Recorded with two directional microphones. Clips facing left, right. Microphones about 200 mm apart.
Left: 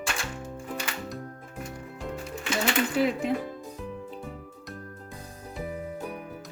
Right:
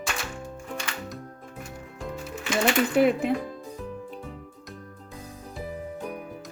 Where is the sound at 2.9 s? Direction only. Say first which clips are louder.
Right 6 dB; 60° right (ahead or behind).